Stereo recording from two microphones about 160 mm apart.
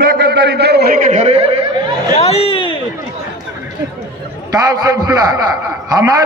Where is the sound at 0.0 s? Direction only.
90° right.